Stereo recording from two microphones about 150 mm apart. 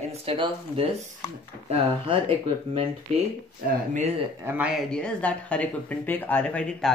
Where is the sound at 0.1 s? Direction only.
40° right (ahead or behind).